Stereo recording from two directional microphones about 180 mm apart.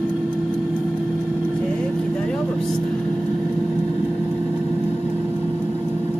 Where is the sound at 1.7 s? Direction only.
5° left (ahead or behind).